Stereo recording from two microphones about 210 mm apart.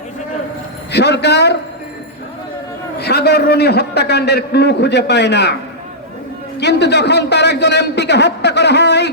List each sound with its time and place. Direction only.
0.9 s a man's voice: 55° left (ahead or behind)
3.0 s a man's voice: 50° left (ahead or behind)
6.6 s a man's voice: 55° left (ahead or behind)